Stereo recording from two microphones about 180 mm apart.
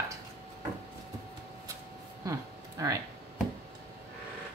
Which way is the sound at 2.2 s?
20° right (ahead or behind).